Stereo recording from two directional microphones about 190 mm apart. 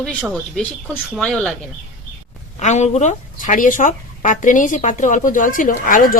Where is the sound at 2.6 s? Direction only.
40° left (ahead or behind).